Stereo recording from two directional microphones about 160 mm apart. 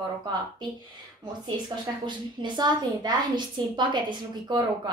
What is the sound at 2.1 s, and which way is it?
A woman's voice, 25° right (ahead or behind).